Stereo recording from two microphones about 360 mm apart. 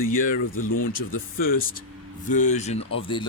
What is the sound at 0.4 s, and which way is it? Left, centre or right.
Speech, left.